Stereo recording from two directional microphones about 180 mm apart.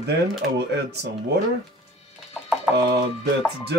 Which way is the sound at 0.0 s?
70° right (ahead or behind).